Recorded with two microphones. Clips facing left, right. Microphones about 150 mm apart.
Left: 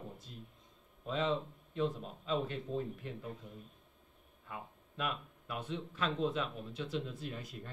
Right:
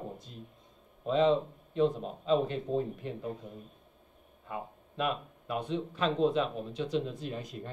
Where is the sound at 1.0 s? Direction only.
25° right (ahead or behind).